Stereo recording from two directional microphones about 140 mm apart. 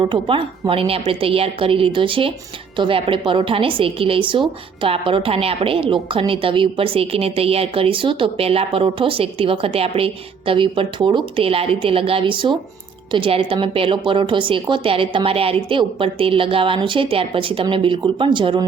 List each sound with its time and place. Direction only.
0.0 s a woman's voice: 35° right (ahead or behind)